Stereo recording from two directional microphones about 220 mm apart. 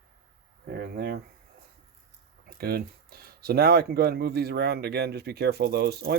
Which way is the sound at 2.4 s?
45° right (ahead or behind).